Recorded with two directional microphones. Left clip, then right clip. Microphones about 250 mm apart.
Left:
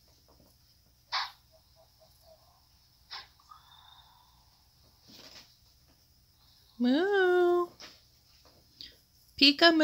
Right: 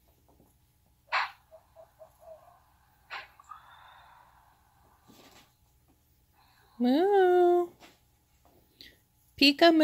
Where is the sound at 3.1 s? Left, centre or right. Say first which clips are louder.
Right 4 dB; right.